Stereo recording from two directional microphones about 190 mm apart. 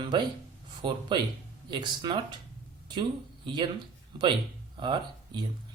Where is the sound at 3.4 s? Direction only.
25° right (ahead or behind).